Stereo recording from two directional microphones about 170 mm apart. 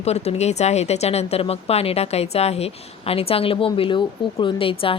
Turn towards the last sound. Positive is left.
turn(degrees=30)  # may be behind; listen again after turning